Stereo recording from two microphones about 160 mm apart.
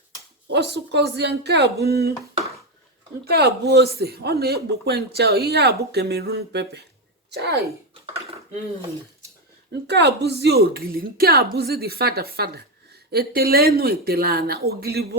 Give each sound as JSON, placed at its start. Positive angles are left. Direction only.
{"t": 0.4, "sound": "speech", "side_deg": -90}
{"t": 3.2, "sound": "a woman's voice", "side_deg": -85}
{"t": 9.8, "sound": "speech", "side_deg": -90}
{"t": 11.5, "sound": "a woman's voice", "side_deg": -85}